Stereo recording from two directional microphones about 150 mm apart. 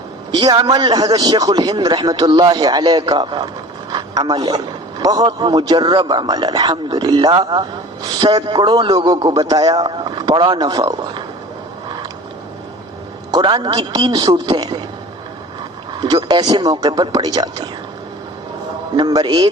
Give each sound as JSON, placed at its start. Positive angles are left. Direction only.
{"t": 0.3, "sound": "a man's voice", "side_deg": -30}
{"t": 13.3, "sound": "a man's voice", "side_deg": -30}
{"t": 15.9, "sound": "a man's voice", "side_deg": -30}
{"t": 18.9, "sound": "a man's voice", "side_deg": -30}